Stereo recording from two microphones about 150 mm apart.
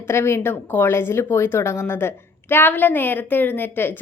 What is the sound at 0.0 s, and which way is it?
A woman's voice, 15° left (ahead or behind).